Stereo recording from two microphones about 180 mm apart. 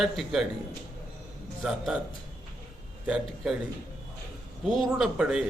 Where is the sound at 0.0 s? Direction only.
Centre (ahead or behind).